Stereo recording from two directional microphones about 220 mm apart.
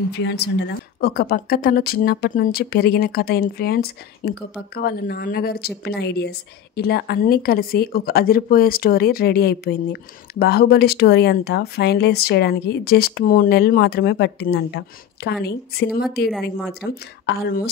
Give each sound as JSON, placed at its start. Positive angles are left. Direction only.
{"t": 0.2, "sound": "a woman's voice", "side_deg": 50}